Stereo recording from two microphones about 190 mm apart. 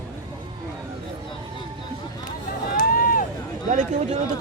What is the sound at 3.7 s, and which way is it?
Speech, 40° right (ahead or behind).